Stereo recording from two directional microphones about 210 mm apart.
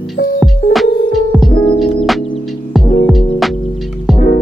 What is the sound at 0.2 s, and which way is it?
Music, 60° left (ahead or behind).